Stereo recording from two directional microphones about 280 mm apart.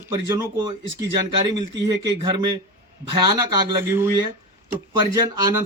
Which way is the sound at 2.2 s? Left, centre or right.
Centre.